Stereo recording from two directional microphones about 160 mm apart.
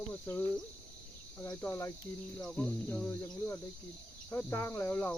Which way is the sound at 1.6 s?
15° left (ahead or behind).